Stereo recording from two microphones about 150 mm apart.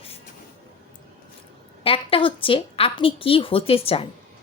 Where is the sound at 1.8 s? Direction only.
35° left (ahead or behind).